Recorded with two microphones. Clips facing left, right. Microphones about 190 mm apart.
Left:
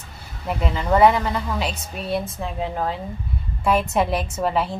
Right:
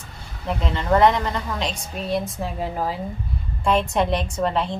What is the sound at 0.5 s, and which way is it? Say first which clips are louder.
A woman's voice: even; 5° left (ahead or behind).